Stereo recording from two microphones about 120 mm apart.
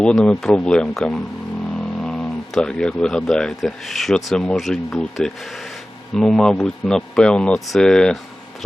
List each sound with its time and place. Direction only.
0.0 s speech: 5° left (ahead or behind)